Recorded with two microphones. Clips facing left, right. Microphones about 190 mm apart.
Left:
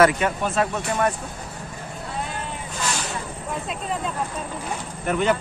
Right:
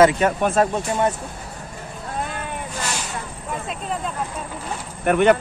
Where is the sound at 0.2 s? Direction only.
40° right (ahead or behind).